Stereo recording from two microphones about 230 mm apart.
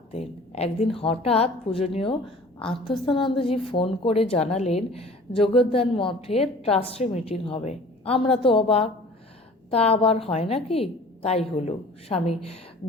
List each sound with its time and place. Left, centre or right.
0.1 s a woman's voice: left